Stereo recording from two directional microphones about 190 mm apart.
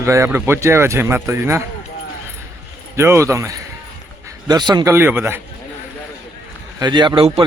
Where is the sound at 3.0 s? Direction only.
15° right (ahead or behind).